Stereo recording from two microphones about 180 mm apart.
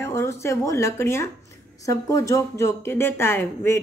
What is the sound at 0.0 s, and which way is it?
Speech, 15° left (ahead or behind).